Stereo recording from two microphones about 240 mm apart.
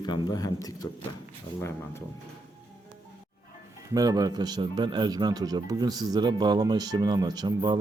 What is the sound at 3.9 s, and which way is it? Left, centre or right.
Speech, centre.